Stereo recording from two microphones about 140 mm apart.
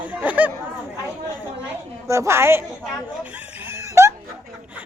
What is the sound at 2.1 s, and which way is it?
Speech, 20° right (ahead or behind).